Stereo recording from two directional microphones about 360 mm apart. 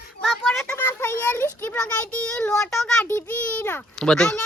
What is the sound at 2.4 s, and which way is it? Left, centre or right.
A child's voice, centre.